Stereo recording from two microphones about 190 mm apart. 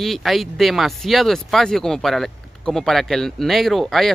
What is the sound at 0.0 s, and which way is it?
Speech, centre (ahead or behind).